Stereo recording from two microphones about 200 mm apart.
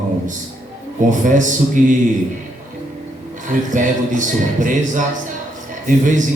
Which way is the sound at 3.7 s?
40° right (ahead or behind).